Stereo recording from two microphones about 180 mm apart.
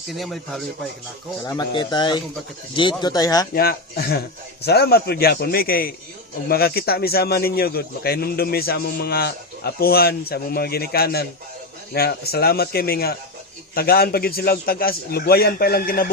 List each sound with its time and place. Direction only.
0.1 s a man's voice: centre (ahead or behind)
1.5 s speech: 25° left (ahead or behind)
3.5 s speech: 60° left (ahead or behind)